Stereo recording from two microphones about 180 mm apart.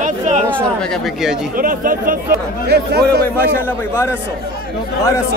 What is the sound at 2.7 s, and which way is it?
Speech, 65° right (ahead or behind).